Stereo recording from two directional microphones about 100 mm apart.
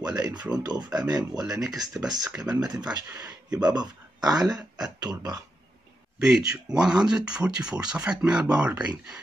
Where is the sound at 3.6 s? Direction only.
45° right (ahead or behind).